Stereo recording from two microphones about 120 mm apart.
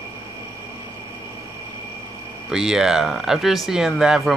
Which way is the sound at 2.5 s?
5° right (ahead or behind).